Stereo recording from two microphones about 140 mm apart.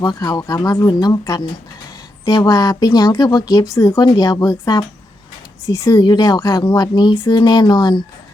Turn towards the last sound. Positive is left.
turn(degrees=30)  # may be behind; listen again after turning